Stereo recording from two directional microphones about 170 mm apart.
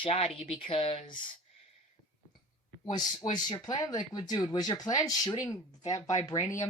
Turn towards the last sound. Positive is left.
turn(degrees=20)  # may be behind; listen again after turning